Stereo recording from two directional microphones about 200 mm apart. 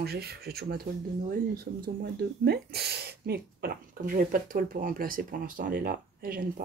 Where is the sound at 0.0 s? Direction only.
50° right (ahead or behind).